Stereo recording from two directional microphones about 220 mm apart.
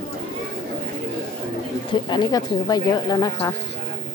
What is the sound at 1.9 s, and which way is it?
A woman's voice, 20° left (ahead or behind).